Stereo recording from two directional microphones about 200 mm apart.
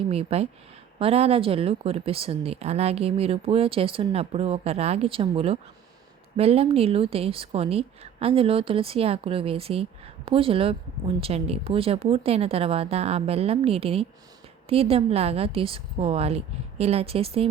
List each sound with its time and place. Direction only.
0.1 s speech: 30° right (ahead or behind)